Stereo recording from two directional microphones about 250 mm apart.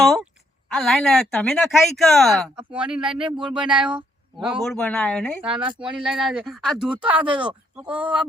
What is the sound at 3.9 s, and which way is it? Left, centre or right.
Speech, centre.